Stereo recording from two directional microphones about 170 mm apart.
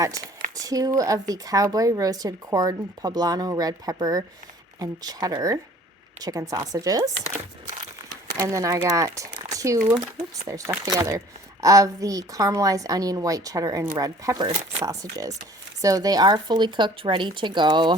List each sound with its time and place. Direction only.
0.0 s speech: 20° right (ahead or behind)
7.8 s crumpling: 20° right (ahead or behind)
10.4 s speech: 20° right (ahead or behind)